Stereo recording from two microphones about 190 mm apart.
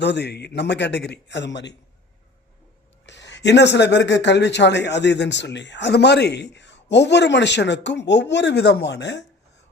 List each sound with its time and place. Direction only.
0.0 s speech: 65° left (ahead or behind)
3.1 s speech: 65° left (ahead or behind)